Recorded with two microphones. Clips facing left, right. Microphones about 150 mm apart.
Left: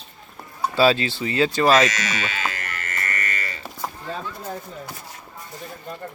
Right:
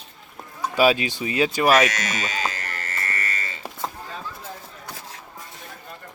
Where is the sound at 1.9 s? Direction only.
50° right (ahead or behind); by 3.6 s 25° right (ahead or behind).